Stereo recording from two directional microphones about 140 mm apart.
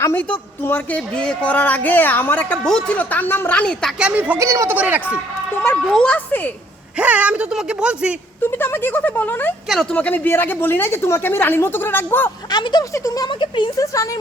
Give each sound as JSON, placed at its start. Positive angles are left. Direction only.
{"t": 0.0, "sound": "a woman's voice", "side_deg": 10}
{"t": 4.0, "sound": "a woman's voice", "side_deg": -10}
{"t": 4.4, "sound": "speech", "side_deg": -20}
{"t": 4.8, "sound": "a woman's voice", "side_deg": -10}
{"t": 5.7, "sound": "a woman's voice", "side_deg": 5}
{"t": 7.0, "sound": "a woman's voice", "side_deg": -10}
{"t": 8.4, "sound": "a woman's voice", "side_deg": 15}
{"t": 9.6, "sound": "speech", "side_deg": 0}
{"t": 10.0, "sound": "a woman's voice", "side_deg": 15}
{"t": 12.5, "sound": "speech", "side_deg": 30}